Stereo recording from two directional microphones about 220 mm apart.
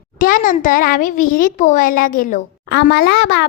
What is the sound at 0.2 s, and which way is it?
A child's voice, 40° left (ahead or behind).